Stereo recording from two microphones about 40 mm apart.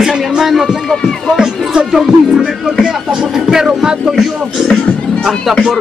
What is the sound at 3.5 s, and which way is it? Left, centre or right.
Speech, centre.